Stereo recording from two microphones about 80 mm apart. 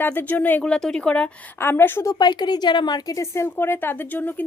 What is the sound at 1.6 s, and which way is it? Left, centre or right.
Speech, left.